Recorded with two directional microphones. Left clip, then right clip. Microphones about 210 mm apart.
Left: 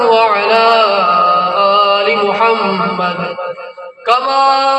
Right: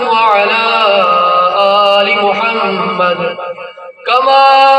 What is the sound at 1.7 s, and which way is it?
Mantra, 55° left (ahead or behind).